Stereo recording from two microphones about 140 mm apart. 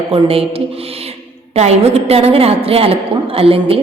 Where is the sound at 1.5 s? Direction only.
50° right (ahead or behind).